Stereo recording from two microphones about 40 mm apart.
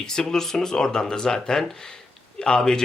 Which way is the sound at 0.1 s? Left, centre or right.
Centre.